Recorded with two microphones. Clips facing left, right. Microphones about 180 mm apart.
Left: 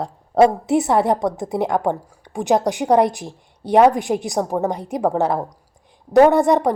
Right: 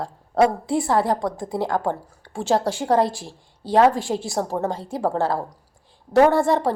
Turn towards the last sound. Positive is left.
turn(degrees=15)  # may be behind; listen again after turning